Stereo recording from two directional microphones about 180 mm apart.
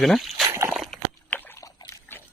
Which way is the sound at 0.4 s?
15° right (ahead or behind).